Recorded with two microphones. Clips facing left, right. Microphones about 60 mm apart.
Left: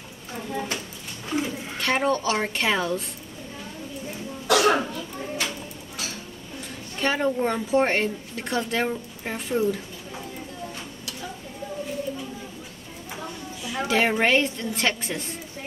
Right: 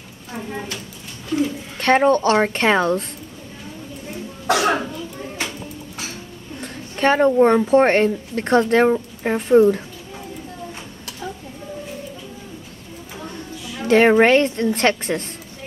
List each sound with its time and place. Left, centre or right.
1.3 s bird: centre
1.8 s a woman's voice: right
4.5 s speech: right
6.6 s a woman's voice: right
13.8 s a woman's voice: right